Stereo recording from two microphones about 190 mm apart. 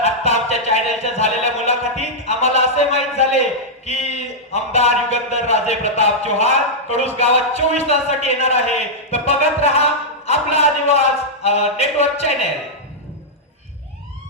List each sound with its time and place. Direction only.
0.0 s music: 35° left (ahead or behind)
4.5 s a sound: 35° left (ahead or behind)
7.2 s a man's voice: 35° left (ahead or behind)